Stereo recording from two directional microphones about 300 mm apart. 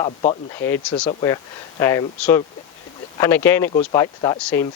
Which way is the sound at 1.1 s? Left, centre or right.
Centre.